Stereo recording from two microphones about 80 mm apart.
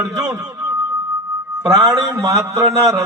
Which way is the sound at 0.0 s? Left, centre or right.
Right.